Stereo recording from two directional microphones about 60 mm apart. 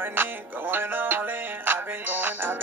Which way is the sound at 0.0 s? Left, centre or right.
Right.